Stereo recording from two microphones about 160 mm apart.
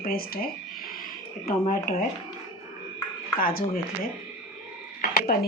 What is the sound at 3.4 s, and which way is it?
Speech, 65° left (ahead or behind).